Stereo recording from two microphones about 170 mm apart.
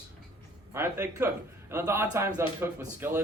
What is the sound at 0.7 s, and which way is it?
Speech, 15° right (ahead or behind).